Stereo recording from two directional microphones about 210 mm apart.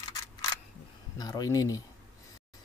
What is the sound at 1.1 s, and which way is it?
Speech, 20° left (ahead or behind).